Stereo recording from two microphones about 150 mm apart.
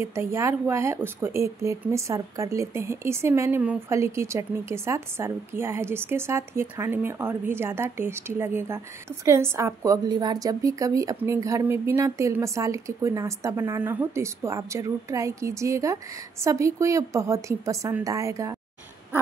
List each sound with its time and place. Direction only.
0.0 s speech: 15° right (ahead or behind)